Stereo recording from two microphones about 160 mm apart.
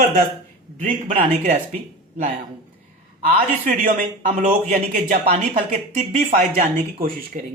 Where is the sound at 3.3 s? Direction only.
55° right (ahead or behind).